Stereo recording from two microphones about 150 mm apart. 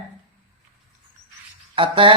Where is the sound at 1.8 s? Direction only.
35° right (ahead or behind).